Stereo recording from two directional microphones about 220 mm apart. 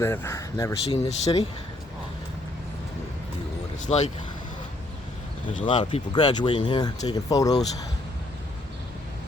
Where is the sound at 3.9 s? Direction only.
30° left (ahead or behind).